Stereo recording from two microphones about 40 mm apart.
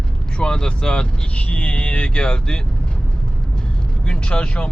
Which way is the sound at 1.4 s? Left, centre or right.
Left.